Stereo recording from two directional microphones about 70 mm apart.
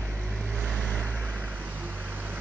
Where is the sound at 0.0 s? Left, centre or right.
Right.